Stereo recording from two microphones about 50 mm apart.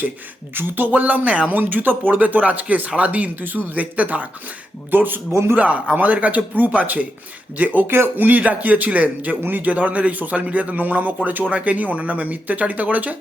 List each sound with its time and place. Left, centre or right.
0.5 s a man's voice: right
4.9 s speech: right
5.3 s a man's voice: right
5.5 s a man's voice: right
7.9 s speech: right
8.1 s a man's voice: right